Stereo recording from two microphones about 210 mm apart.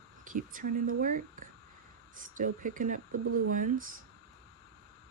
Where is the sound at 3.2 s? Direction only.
90° right.